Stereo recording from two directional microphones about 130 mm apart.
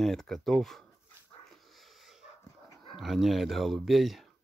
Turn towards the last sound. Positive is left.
turn(degrees=0)  # may be behind; listen again after turning